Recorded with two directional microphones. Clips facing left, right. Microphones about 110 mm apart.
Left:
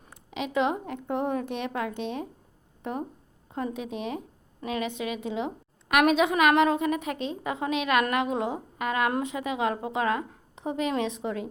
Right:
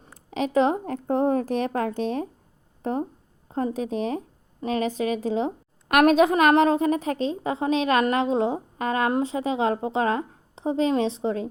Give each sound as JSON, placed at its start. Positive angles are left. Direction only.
{"t": 0.0, "sound": "a woman's voice", "side_deg": -40}